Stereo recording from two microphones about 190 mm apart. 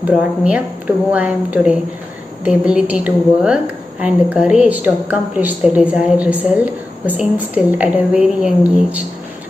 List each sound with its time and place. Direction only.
0.1 s a woman's voice: 5° right (ahead or behind)